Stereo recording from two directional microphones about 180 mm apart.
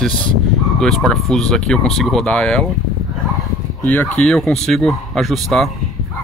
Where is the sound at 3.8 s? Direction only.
10° left (ahead or behind).